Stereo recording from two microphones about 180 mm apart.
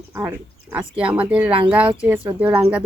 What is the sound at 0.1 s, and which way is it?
Speech, 15° right (ahead or behind).